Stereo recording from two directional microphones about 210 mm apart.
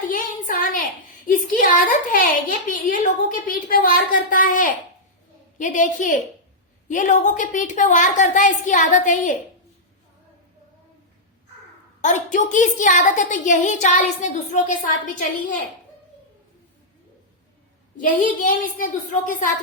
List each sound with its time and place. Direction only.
0.1 s a sound: 40° left (ahead or behind)
1.3 s a woman's voice: 40° left (ahead or behind)
12.0 s a woman's voice: 35° left (ahead or behind)
17.9 s a woman's voice: 40° left (ahead or behind)